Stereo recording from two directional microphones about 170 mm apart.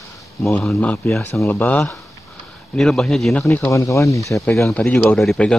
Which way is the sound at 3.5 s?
20° left (ahead or behind).